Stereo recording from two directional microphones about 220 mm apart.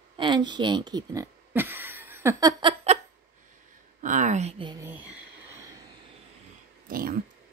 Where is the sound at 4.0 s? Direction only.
35° right (ahead or behind).